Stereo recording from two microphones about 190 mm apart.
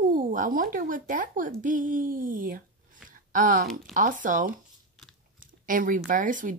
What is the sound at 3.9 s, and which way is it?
Speech, 45° right (ahead or behind).